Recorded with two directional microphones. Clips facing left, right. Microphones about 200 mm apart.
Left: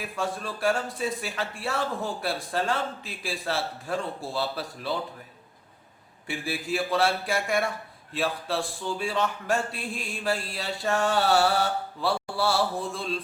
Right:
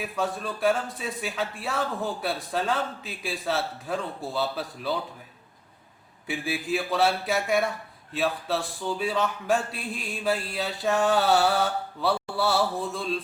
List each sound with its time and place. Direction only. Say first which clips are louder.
0.0 s speech: right 2 dB; centre (ahead or behind)
6.2 s speech: right 2 dB; centre (ahead or behind)